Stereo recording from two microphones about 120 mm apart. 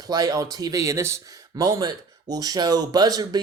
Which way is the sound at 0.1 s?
30° right (ahead or behind).